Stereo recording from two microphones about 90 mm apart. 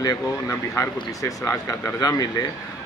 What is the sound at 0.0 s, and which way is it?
A man's voice, 40° left (ahead or behind).